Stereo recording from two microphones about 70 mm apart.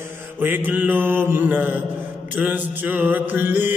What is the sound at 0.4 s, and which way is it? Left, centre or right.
Mantra, right.